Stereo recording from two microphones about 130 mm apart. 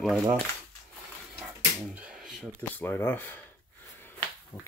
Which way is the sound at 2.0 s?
5° right (ahead or behind).